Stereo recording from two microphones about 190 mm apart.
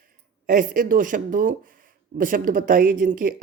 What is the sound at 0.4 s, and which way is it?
Speech, 45° right (ahead or behind).